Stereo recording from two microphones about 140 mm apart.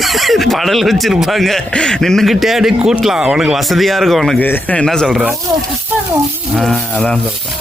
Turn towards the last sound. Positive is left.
turn(degrees=5)  # may be behind; listen again after turning